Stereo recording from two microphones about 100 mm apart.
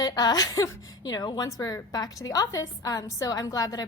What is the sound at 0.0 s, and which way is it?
A woman's voice, 40° left (ahead or behind).